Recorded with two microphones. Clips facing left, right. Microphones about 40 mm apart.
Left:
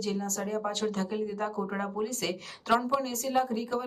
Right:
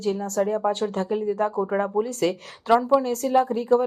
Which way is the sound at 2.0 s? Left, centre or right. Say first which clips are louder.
Right 9 dB; right.